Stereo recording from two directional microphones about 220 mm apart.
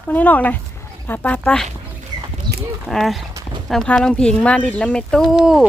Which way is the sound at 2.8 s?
Centre (ahead or behind).